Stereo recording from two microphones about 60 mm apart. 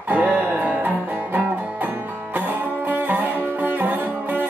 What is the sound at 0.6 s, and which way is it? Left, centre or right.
Music, right.